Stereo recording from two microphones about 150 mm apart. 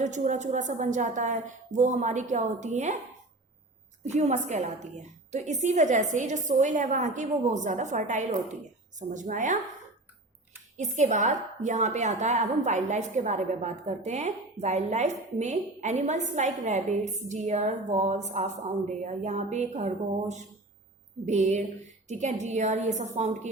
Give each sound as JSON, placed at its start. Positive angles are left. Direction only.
{"t": 0.0, "sound": "a woman's voice", "side_deg": -55}
{"t": 4.0, "sound": "a woman's voice", "side_deg": -50}
{"t": 10.8, "sound": "a woman's voice", "side_deg": -55}